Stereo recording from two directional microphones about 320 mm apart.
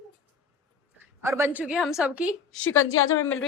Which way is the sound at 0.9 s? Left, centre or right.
Centre.